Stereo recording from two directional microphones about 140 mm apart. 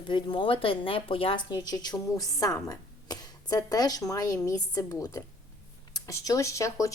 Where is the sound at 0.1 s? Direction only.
35° left (ahead or behind).